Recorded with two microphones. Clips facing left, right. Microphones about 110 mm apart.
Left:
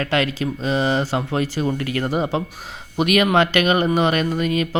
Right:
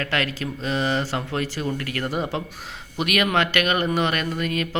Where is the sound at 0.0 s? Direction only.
20° left (ahead or behind).